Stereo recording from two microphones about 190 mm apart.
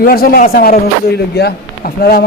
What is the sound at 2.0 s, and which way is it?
Speech, 55° left (ahead or behind).